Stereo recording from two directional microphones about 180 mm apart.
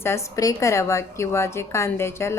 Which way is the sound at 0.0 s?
15° left (ahead or behind).